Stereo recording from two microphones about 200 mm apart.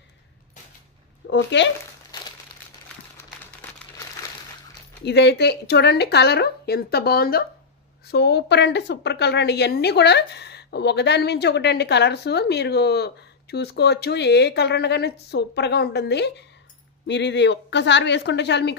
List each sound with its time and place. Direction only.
1.2 s a woman's voice: 65° left (ahead or behind)
5.0 s a woman's voice: 60° left (ahead or behind)